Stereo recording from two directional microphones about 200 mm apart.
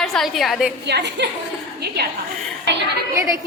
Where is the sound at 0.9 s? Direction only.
60° right (ahead or behind).